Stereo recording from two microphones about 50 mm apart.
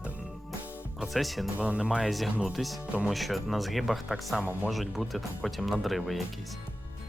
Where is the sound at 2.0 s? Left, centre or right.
Centre.